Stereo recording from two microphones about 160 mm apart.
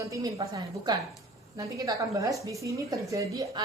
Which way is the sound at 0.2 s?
25° right (ahead or behind).